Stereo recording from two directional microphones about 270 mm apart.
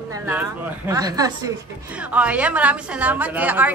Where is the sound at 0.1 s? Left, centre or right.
Centre.